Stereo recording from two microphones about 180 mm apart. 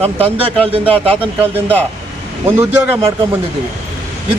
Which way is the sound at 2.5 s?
10° right (ahead or behind).